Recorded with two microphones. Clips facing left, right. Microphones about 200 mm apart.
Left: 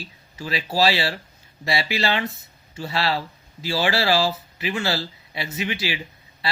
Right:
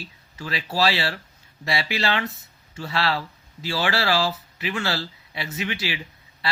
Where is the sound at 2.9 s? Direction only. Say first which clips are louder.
Left 1 dB; 35° left (ahead or behind).